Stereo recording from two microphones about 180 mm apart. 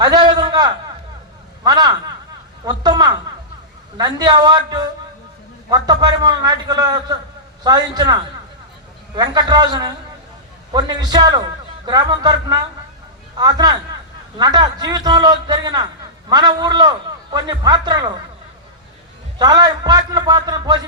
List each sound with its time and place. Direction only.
0.0 s a man's voice: 25° right (ahead or behind)
19.4 s a man's voice: 20° right (ahead or behind)